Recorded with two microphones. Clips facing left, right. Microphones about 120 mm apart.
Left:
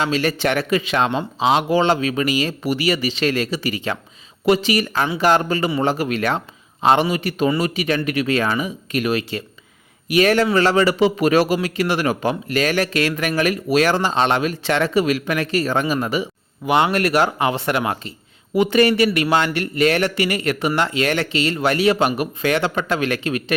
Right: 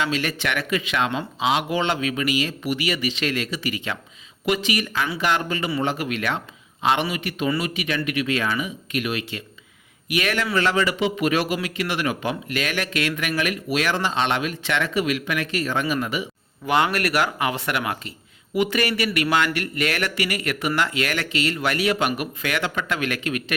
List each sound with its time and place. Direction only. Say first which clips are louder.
0.0 s a man's voice: left 5 dB; 35° left (ahead or behind)
16.6 s a man's voice: left 4 dB; 20° left (ahead or behind)